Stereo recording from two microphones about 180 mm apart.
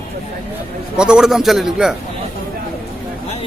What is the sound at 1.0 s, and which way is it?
Speech, 5° right (ahead or behind).